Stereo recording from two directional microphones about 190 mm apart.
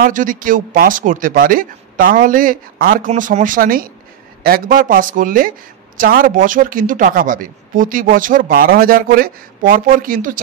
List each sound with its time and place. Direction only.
0.0 s speech: 45° right (ahead or behind)